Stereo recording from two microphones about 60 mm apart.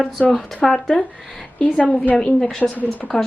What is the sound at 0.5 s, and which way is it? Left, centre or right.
Speech, centre.